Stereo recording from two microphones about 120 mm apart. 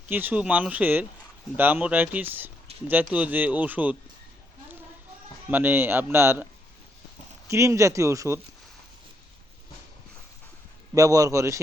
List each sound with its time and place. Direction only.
0.1 s speech: 15° right (ahead or behind)
5.5 s speech: 15° right (ahead or behind)
7.5 s speech: 25° right (ahead or behind)
10.9 s speech: 30° right (ahead or behind)